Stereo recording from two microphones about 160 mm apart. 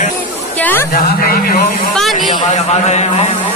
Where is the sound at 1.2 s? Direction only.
70° left (ahead or behind).